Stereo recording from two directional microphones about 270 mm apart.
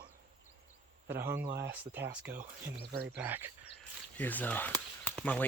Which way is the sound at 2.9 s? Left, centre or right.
Right.